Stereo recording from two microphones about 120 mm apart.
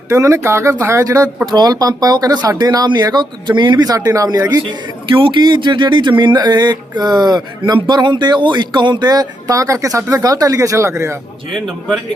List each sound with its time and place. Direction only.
0.1 s speech: 25° right (ahead or behind)